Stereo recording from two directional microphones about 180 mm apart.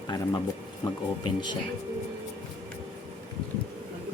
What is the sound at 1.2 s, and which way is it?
Speech, 25° left (ahead or behind).